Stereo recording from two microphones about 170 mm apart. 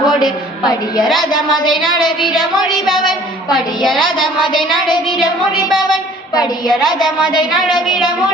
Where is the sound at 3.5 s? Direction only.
Centre (ahead or behind).